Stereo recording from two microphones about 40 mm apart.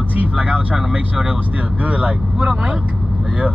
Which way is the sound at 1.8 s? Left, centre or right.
Right.